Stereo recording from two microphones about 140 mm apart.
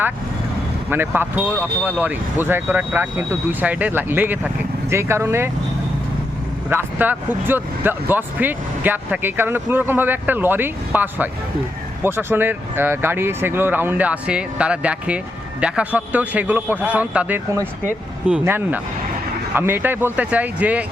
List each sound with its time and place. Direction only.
0.9 s speech: 15° right (ahead or behind)
6.7 s speech: 15° right (ahead or behind)